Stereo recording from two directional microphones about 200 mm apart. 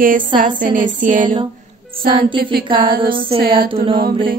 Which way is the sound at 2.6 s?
25° right (ahead or behind).